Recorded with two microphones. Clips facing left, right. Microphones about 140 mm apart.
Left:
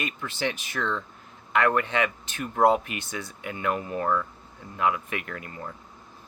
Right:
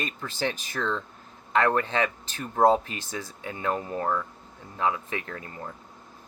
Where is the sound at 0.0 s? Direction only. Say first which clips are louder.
Even; 40° right (ahead or behind).